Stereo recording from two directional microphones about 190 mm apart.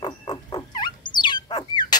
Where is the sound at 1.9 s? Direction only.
20° left (ahead or behind).